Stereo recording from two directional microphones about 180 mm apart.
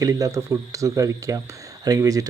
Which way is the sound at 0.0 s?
20° right (ahead or behind).